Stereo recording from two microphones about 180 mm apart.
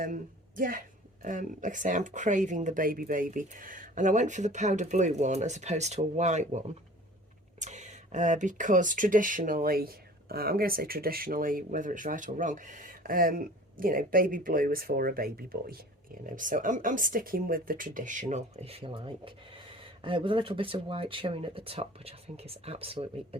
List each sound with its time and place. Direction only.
0.0 s speech: 50° right (ahead or behind)
7.6 s speech: 40° right (ahead or behind)